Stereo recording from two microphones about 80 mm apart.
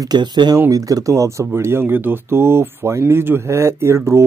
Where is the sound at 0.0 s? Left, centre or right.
Right.